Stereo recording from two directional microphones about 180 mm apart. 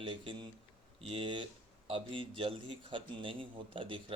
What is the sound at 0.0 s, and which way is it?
A man's voice, 30° right (ahead or behind).